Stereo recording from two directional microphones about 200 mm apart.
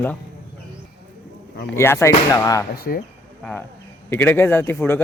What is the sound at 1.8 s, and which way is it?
Speech, 15° left (ahead or behind).